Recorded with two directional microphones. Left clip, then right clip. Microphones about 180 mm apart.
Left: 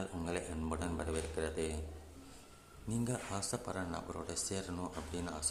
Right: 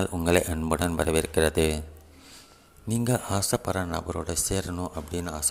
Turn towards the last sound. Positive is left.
turn(degrees=-35)  # may be behind; listen again after turning